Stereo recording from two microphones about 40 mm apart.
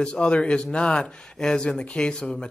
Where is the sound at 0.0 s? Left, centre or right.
Left.